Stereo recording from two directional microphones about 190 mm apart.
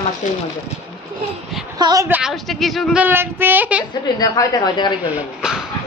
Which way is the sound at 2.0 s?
5° right (ahead or behind).